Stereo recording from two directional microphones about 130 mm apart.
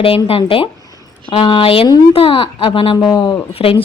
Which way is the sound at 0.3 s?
45° left (ahead or behind).